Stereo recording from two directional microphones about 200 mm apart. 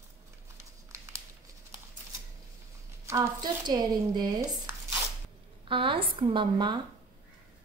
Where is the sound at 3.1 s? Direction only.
15° right (ahead or behind).